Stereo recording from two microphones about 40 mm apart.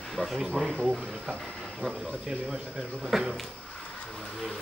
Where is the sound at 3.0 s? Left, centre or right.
Centre.